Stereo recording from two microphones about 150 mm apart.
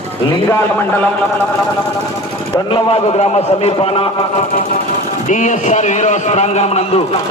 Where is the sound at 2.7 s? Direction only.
40° left (ahead or behind).